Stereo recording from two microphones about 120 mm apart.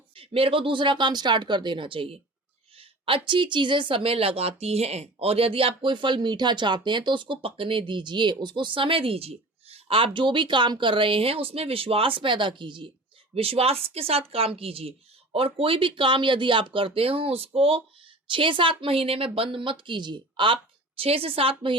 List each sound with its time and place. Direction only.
0.2 s speech: 50° right (ahead or behind)
13.3 s speech: 55° right (ahead or behind)